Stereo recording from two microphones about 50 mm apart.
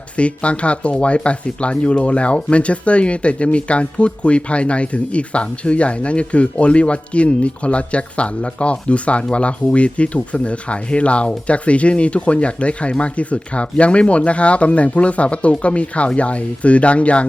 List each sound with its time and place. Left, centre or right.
0.2 s speech: left